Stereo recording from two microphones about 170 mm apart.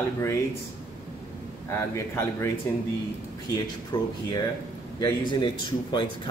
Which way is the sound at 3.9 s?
25° left (ahead or behind).